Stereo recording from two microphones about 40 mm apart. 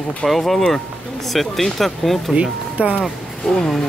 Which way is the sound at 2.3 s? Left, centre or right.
Right.